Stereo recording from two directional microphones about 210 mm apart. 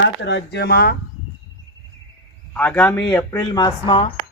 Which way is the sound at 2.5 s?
5° left (ahead or behind).